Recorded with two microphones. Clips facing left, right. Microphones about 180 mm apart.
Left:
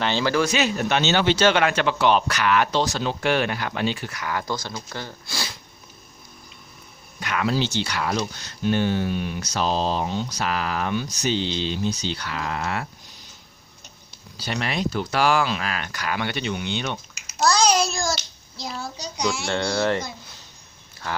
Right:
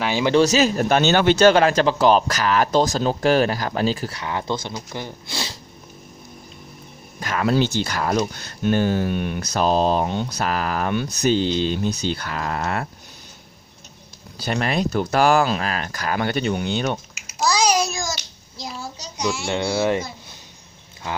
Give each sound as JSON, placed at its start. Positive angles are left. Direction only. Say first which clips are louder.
{"t": 0.0, "sound": "speech", "louder": "right 2 dB", "side_deg": -10}
{"t": 0.4, "sound": "a man's voice", "louder": "right 5 dB", "side_deg": -40}
{"t": 7.2, "sound": "music", "louder": "right 3 dB", "side_deg": -40}
{"t": 7.5, "sound": "speech", "louder": "right 4 dB", "side_deg": -50}
{"t": 14.4, "sound": "speech", "louder": "right 4 dB", "side_deg": -45}
{"t": 17.4, "sound": "a sound", "louder": "even", "side_deg": -10}
{"t": 18.7, "sound": "a child's voice", "louder": "left 3 dB", "side_deg": 0}